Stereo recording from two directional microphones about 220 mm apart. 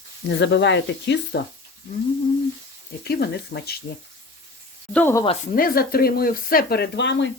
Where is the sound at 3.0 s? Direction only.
45° left (ahead or behind).